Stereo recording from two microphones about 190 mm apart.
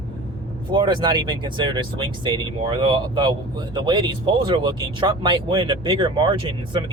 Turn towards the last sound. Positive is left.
turn(degrees=-25)  # may be behind; listen again after turning